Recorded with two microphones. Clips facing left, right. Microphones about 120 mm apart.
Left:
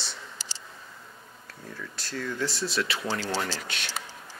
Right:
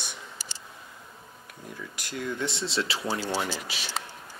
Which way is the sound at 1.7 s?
15° right (ahead or behind).